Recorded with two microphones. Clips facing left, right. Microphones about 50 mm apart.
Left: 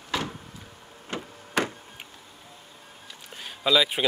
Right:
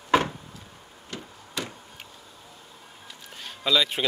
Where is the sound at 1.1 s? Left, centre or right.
Left.